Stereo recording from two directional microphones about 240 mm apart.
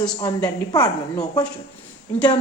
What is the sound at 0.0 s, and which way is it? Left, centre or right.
A woman's voice, centre.